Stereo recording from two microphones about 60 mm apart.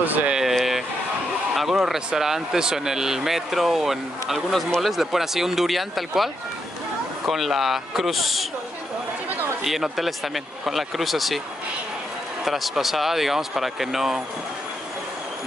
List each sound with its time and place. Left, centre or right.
0.0 s speech: right
0.3 s a sound: centre
1.5 s speech: centre
9.6 s speech: centre
12.4 s speech: centre